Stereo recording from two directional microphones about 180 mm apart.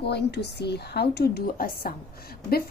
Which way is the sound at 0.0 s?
65° left (ahead or behind).